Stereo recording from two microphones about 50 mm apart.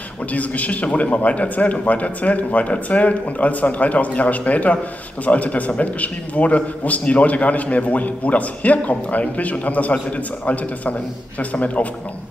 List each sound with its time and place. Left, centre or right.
0.3 s a man's voice: left